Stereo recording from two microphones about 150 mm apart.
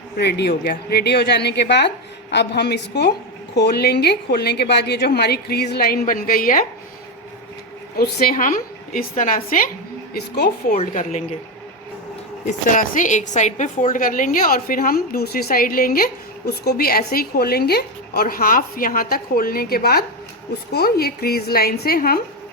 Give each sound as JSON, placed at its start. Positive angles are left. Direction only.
{"t": 0.2, "sound": "a woman's voice", "side_deg": 90}
{"t": 7.9, "sound": "a woman's voice", "side_deg": 90}
{"t": 10.2, "sound": "a woman's voice", "side_deg": 90}
{"t": 10.8, "sound": "speech", "side_deg": 55}
{"t": 12.5, "sound": "a woman's voice", "side_deg": 60}
{"t": 16.5, "sound": "a woman's voice", "side_deg": 90}